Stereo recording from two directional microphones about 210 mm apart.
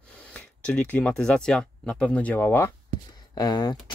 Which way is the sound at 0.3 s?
5° left (ahead or behind).